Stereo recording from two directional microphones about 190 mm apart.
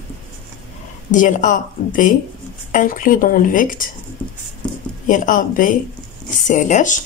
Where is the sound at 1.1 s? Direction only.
45° left (ahead or behind).